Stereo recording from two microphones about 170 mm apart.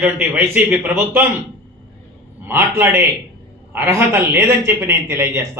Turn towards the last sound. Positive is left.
turn(degrees=-15)  # may be behind; listen again after turning